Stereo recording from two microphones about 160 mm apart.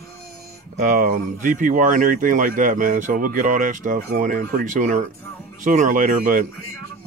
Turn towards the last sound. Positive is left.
turn(degrees=-55)  # may be behind; listen again after turning